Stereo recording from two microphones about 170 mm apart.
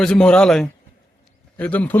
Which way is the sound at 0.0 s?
5° left (ahead or behind).